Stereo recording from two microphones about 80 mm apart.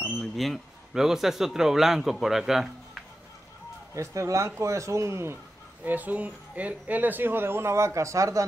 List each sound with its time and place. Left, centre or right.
0.2 s speech: centre
3.9 s a man's voice: right
5.9 s speech: right